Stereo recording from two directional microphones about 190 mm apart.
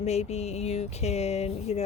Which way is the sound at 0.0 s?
35° left (ahead or behind).